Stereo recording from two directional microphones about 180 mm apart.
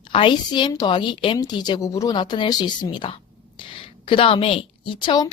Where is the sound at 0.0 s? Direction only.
25° left (ahead or behind).